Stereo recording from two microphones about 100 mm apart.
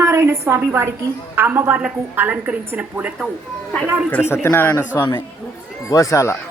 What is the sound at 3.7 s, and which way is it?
Speech, 10° left (ahead or behind).